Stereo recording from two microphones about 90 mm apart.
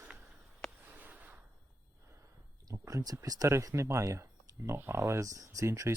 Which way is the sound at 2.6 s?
40° right (ahead or behind).